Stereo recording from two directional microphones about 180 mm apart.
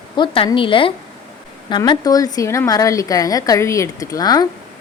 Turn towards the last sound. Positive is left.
turn(degrees=20)  # may be behind; listen again after turning